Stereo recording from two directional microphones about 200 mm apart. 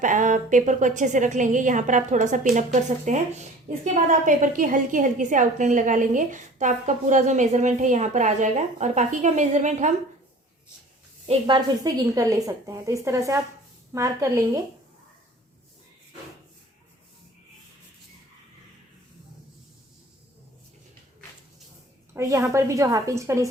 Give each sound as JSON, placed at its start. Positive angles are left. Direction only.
{"t": 0.0, "sound": "a woman's voice", "side_deg": -40}
{"t": 11.3, "sound": "a woman's voice", "side_deg": -25}
{"t": 22.1, "sound": "a woman's voice", "side_deg": -15}